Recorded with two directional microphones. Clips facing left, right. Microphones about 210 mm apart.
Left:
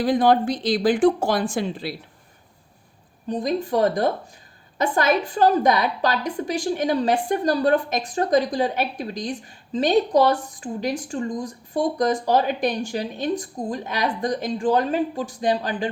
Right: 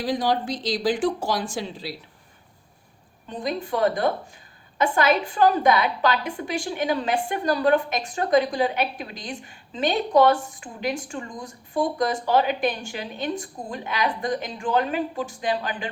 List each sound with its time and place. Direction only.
0.0 s speech: 55° left (ahead or behind)
3.2 s a woman's voice: 40° left (ahead or behind)